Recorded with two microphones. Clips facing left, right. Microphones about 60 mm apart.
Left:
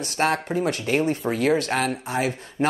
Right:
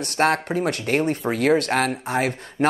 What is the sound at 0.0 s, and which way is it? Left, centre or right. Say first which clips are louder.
Speech: right 3 dB; right.